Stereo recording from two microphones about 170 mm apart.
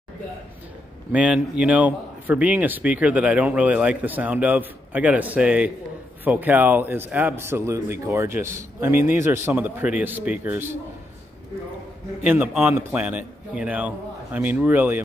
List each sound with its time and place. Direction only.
1.1 s speech: 5° right (ahead or behind)
12.2 s speech: 10° right (ahead or behind)